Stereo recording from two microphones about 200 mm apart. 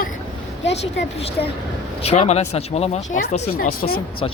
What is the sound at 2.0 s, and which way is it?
Speech, 30° left (ahead or behind).